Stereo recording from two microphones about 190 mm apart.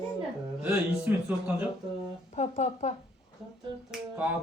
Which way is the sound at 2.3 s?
35° left (ahead or behind).